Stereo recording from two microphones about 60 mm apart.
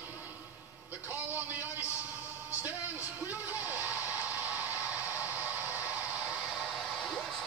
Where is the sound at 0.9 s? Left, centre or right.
Right.